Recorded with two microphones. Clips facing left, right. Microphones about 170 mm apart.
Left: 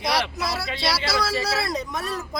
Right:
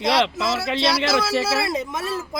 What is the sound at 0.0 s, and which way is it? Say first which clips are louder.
Speech: right 5 dB; 25° right (ahead or behind).